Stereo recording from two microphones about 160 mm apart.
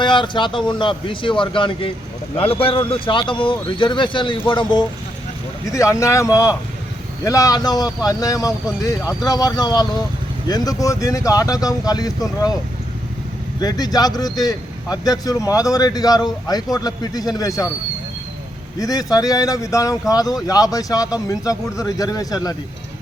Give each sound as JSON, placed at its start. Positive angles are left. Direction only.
{"t": 0.0, "sound": "speech", "side_deg": 30}
{"t": 13.6, "sound": "speech", "side_deg": 25}
{"t": 18.8, "sound": "speech", "side_deg": 25}